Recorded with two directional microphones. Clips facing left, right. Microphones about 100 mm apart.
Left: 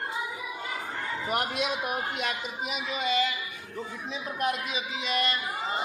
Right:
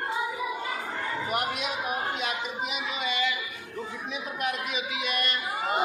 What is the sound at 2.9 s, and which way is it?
Speech, 40° left (ahead or behind).